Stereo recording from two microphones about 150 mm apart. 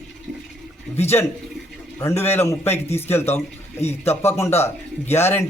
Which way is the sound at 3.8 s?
45° left (ahead or behind).